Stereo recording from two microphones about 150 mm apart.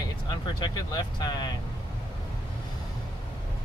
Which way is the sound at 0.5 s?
30° left (ahead or behind).